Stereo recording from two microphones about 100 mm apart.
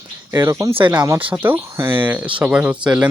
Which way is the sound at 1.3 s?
20° right (ahead or behind).